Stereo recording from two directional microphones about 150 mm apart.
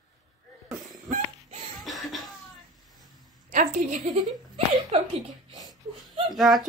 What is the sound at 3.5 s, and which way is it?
Speech, 55° right (ahead or behind).